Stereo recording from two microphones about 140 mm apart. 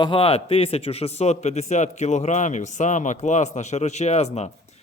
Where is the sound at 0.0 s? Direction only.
40° left (ahead or behind).